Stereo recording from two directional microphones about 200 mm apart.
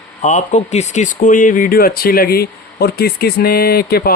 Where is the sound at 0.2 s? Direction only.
35° left (ahead or behind).